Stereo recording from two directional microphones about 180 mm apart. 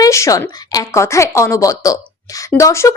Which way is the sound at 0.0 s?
15° left (ahead or behind).